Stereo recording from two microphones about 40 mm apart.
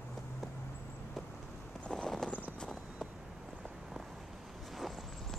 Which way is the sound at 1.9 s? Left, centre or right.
Centre.